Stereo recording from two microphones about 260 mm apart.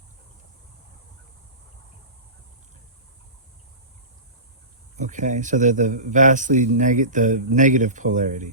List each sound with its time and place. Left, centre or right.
4.9 s speech: right